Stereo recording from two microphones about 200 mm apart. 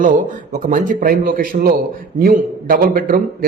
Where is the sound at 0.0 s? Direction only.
40° right (ahead or behind).